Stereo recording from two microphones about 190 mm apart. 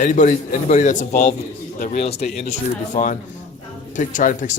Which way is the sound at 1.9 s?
35° left (ahead or behind).